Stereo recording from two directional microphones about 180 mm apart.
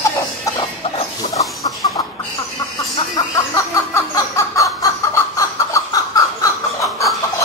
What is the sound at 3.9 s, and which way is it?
Snicker, 15° left (ahead or behind).